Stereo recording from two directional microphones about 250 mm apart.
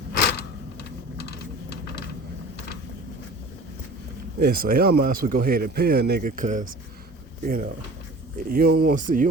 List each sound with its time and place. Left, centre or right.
0.1 s a sound: left
4.4 s a man's voice: right
8.4 s a man's voice: right